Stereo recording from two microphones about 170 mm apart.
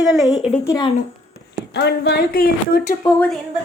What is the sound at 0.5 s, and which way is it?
Speech, 15° left (ahead or behind).